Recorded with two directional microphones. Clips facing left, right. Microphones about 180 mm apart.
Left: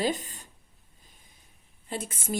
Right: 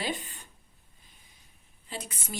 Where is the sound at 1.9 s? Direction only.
50° left (ahead or behind).